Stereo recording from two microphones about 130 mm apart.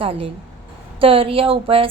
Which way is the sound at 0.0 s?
45° right (ahead or behind).